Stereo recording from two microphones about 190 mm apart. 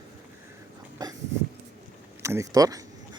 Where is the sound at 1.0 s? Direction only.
20° right (ahead or behind).